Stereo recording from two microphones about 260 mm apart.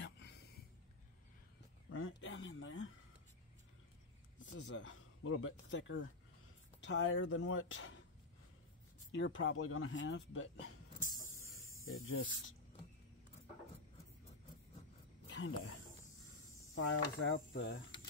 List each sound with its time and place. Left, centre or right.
0.0 s a sound: left
1.9 s speech: left
4.4 s speech: left
9.1 s speech: left
11.6 s snake: left
15.2 s a sound: left
16.5 s mechanisms: left
17.5 s speech: left